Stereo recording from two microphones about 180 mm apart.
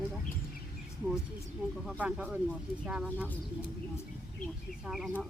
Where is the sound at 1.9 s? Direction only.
5° right (ahead or behind).